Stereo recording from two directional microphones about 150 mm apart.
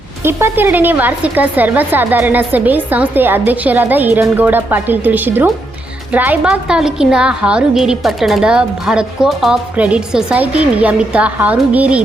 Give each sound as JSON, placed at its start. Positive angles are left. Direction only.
{"t": 0.2, "sound": "a woman's voice", "side_deg": -15}